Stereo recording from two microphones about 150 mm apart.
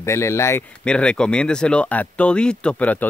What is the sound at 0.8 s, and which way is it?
Speech, 5° left (ahead or behind).